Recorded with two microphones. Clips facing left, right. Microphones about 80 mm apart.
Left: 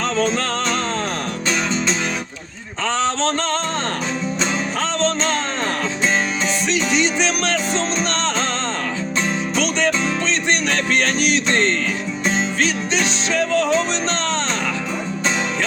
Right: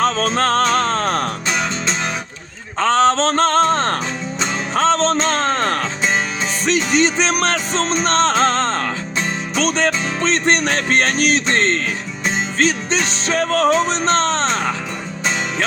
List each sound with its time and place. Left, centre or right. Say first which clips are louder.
0.3 s music: right 5 dB; right
2.8 s music: right 6 dB; right